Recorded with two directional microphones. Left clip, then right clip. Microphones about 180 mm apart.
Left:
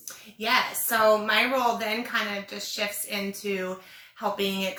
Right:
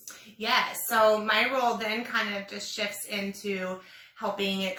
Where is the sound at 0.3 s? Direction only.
20° left (ahead or behind).